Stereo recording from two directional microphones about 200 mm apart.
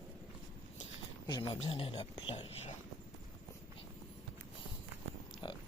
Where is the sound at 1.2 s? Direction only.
25° left (ahead or behind).